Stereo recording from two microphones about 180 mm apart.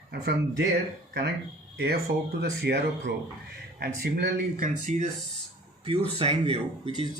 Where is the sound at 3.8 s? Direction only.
55° right (ahead or behind).